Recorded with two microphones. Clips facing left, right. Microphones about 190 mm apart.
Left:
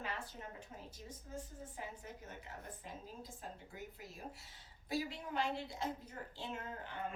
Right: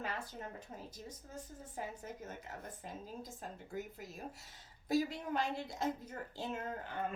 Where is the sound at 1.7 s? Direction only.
45° right (ahead or behind).